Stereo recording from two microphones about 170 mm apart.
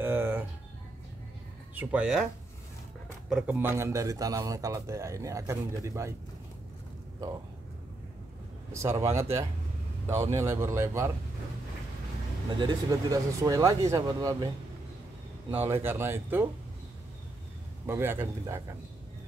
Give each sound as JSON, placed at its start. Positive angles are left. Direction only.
{"t": 0.0, "sound": "a sound", "side_deg": -10}
{"t": 1.8, "sound": "a man's voice", "side_deg": -10}
{"t": 3.3, "sound": "a man's voice", "side_deg": -10}
{"t": 9.0, "sound": "a man's voice", "side_deg": -15}
{"t": 12.4, "sound": "speech", "side_deg": -25}
{"t": 15.5, "sound": "a man's voice", "side_deg": -15}
{"t": 17.8, "sound": "a man's voice", "side_deg": -15}